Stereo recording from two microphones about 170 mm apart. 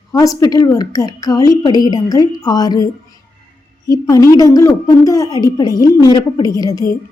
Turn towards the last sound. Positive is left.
turn(degrees=20)  # may be behind; listen again after turning